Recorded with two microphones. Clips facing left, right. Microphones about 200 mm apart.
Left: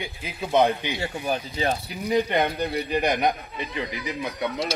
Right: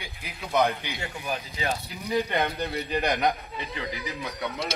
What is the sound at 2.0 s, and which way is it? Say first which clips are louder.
A man's voice: left 4 dB; 15° left (ahead or behind).